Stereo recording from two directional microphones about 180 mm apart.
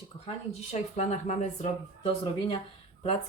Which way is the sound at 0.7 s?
40° left (ahead or behind).